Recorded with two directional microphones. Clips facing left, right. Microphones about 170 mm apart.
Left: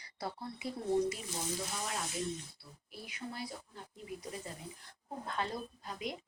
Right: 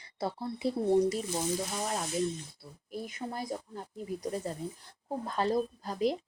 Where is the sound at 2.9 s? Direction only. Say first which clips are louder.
Right 7 dB; 45° right (ahead or behind).